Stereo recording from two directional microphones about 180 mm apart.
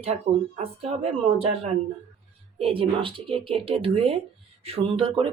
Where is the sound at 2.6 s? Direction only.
30° right (ahead or behind).